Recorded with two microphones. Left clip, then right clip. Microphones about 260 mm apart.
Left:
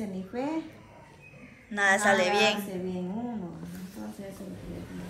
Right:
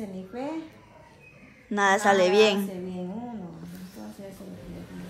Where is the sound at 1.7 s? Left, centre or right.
Centre.